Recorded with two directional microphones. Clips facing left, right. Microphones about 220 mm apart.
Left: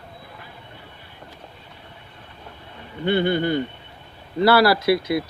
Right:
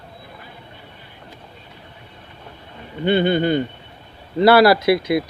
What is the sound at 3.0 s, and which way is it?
Speech, 20° right (ahead or behind).